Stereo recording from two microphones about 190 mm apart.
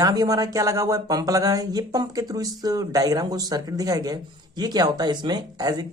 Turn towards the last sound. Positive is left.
turn(degrees=-20)  # may be behind; listen again after turning